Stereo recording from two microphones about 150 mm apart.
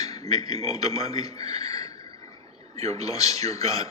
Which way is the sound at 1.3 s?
45° right (ahead or behind).